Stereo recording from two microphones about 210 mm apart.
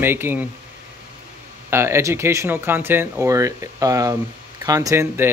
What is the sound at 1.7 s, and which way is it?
Speech, 10° right (ahead or behind).